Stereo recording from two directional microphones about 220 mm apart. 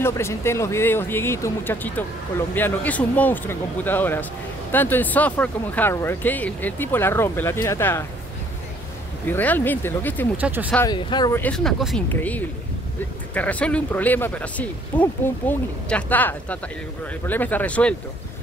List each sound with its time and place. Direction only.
0.0 s speech: 10° left (ahead or behind)
9.3 s speech: 10° left (ahead or behind)
10.3 s speech: 5° right (ahead or behind)
10.9 s speech: 20° left (ahead or behind)
11.4 s speech: 5° left (ahead or behind)